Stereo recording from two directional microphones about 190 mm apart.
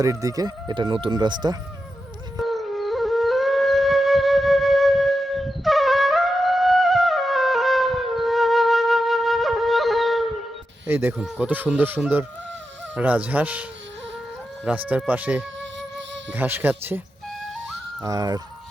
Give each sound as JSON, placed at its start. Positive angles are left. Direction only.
{"t": 0.0, "sound": "speech", "side_deg": -15}
{"t": 2.4, "sound": "music", "side_deg": 0}
{"t": 10.8, "sound": "speech", "side_deg": -10}
{"t": 18.0, "sound": "speech", "side_deg": -20}